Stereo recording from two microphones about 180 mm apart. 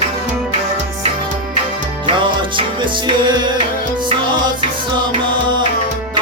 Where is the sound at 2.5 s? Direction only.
25° right (ahead or behind).